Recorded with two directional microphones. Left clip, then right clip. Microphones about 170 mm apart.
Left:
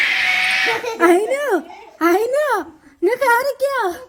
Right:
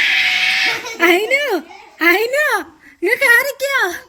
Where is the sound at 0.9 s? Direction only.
25° right (ahead or behind).